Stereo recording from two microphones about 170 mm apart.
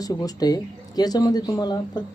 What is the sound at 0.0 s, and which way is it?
Speech, 20° left (ahead or behind).